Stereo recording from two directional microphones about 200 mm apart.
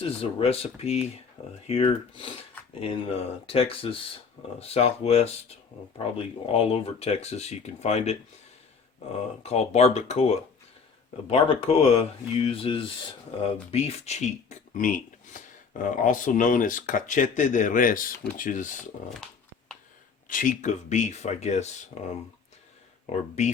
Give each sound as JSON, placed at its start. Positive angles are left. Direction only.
{"t": 0.0, "sound": "speech", "side_deg": 30}
{"t": 9.4, "sound": "speech", "side_deg": 30}
{"t": 20.2, "sound": "speech", "side_deg": 40}